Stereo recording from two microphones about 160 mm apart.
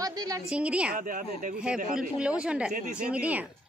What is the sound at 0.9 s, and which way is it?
Speech, 55° right (ahead or behind).